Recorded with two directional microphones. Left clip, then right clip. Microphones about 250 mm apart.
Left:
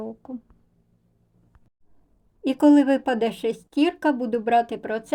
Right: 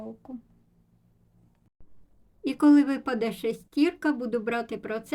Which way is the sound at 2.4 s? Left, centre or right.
Centre.